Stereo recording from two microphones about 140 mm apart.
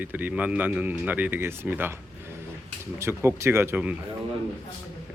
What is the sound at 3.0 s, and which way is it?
Speech, 20° right (ahead or behind).